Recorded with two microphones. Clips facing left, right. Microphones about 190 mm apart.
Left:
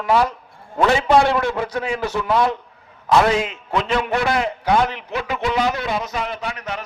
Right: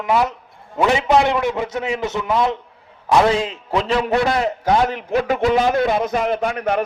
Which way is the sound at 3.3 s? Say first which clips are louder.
Right 1 dB; 30° right (ahead or behind).